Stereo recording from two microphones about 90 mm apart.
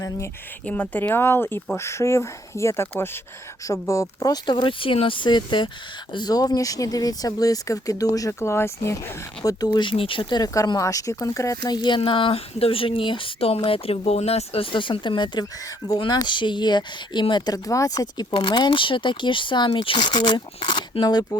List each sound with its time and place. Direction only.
0.6 s speech: 20° left (ahead or behind); by 4.1 s 35° left (ahead or behind)
4.2 s speech: 50° left (ahead or behind)
6.1 s speech: 45° left (ahead or behind)
8.3 s speech: 30° left (ahead or behind)
9.4 s speech: 40° left (ahead or behind)
9.6 s speech: 65° left (ahead or behind)
10.8 s speech: 40° left (ahead or behind)
11.6 s speech: 55° left (ahead or behind)
11.9 s speech: 75° left (ahead or behind)
14.5 s speech: 80° left; by 18.3 s 45° left (ahead or behind)
18.3 s speech: 60° left (ahead or behind)
20.6 s speech: 75° left (ahead or behind); by 21.2 s 55° left (ahead or behind)